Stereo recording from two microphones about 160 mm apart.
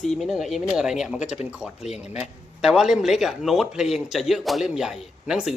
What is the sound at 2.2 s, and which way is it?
A man's voice, 5° right (ahead or behind).